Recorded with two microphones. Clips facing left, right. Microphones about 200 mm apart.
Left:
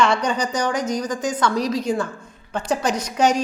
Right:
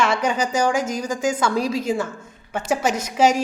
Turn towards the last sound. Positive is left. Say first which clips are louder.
# right 1 dB
turn(degrees=-5)  # may be behind; listen again after turning